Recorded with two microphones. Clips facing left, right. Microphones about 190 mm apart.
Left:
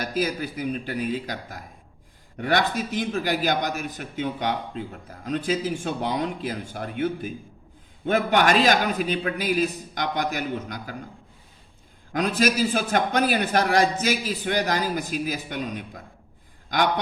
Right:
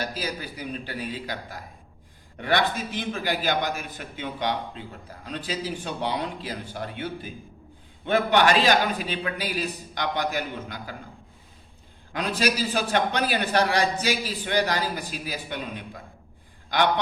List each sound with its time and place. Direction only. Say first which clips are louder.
0.1 s a man's voice: left 6 dB; 50° left (ahead or behind)
12.1 s a man's voice: left 3 dB; 45° left (ahead or behind)